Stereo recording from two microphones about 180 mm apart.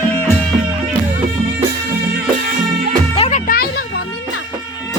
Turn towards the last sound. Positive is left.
turn(degrees=35)  # may be behind; listen again after turning